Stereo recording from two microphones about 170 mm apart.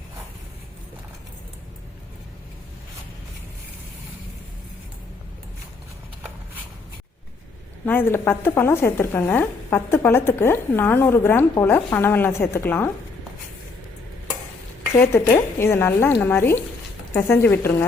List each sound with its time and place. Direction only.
7.9 s speech: 10° left (ahead or behind)
14.9 s speech: 15° left (ahead or behind)